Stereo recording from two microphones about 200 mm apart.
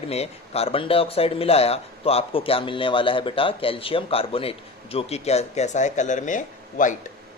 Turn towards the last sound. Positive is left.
turn(degrees=40)  # may be behind; listen again after turning